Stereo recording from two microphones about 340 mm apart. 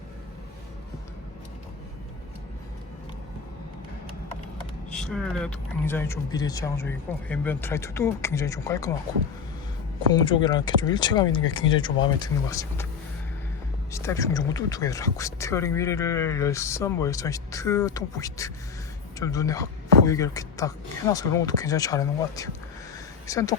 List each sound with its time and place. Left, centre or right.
4.9 s speech: centre
10.1 s speech: centre
13.9 s speech: centre